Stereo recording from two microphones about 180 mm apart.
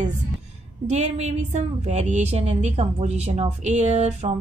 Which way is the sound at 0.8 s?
40° right (ahead or behind).